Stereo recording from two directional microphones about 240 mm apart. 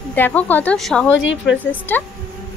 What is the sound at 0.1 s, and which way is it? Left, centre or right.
Speech, centre.